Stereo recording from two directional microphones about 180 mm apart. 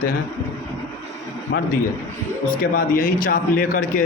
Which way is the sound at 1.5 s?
70° left (ahead or behind).